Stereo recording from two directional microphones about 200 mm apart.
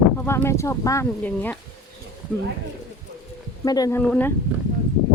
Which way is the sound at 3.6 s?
20° left (ahead or behind).